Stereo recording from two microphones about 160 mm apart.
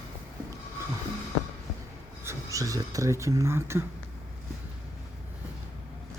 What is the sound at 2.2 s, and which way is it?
Speech, 20° right (ahead or behind).